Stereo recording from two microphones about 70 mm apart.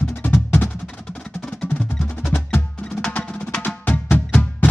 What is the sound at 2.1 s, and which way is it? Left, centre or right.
Percussion, left.